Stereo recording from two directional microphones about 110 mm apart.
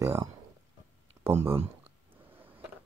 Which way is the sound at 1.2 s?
20° right (ahead or behind).